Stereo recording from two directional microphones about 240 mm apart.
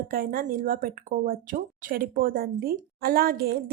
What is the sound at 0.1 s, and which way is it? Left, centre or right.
Speech, right.